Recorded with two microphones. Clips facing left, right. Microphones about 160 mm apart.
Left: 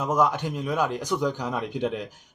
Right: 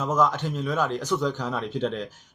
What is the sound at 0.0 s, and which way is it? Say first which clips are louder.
Speech: even; 10° left (ahead or behind).